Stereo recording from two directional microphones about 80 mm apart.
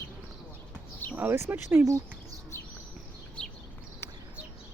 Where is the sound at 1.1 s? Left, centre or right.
Right.